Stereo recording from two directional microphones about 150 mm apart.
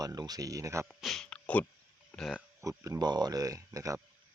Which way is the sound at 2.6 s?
20° right (ahead or behind).